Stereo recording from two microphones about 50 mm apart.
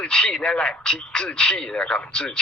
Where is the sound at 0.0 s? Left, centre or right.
Centre.